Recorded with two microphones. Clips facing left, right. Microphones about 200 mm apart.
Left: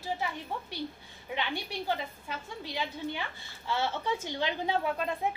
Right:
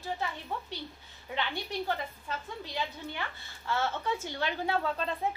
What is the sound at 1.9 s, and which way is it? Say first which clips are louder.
A woman's voice: left 1 dB; 15° left (ahead or behind).